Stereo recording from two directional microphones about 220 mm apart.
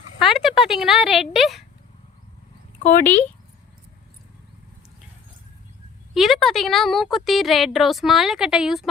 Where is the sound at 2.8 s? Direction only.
35° left (ahead or behind).